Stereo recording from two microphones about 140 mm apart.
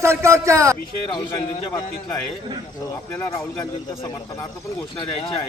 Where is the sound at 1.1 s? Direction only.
35° left (ahead or behind).